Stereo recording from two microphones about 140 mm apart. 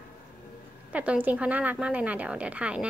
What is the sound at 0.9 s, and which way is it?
A woman's voice, 10° right (ahead or behind).